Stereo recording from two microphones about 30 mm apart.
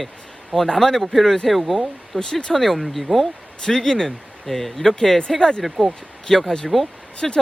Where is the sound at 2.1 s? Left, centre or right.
Centre.